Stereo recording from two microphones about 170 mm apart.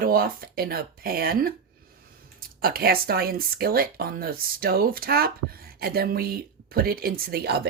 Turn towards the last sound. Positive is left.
turn(degrees=-70)  # may be behind; listen again after turning